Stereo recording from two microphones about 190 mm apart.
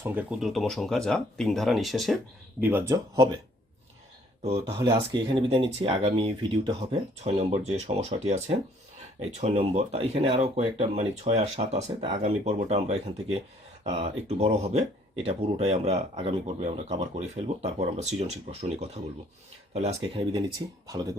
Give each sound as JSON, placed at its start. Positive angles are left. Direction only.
{"t": 0.0, "sound": "speech", "side_deg": -10}
{"t": 4.8, "sound": "speech", "side_deg": -25}
{"t": 19.7, "sound": "speech", "side_deg": -35}